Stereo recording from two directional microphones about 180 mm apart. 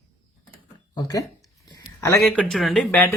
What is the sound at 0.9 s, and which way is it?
Speech, 25° left (ahead or behind).